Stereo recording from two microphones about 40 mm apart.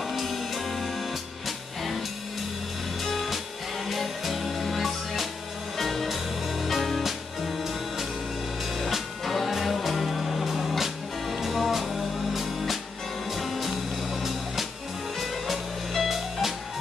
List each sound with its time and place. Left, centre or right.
0.1 s music: centre
3.0 s music: centre